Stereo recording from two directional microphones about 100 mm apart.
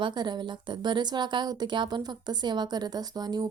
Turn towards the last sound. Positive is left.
turn(degrees=-40)  # may be behind; listen again after turning